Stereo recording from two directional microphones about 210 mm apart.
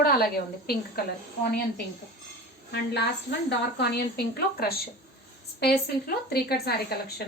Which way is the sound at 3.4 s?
50° left (ahead or behind).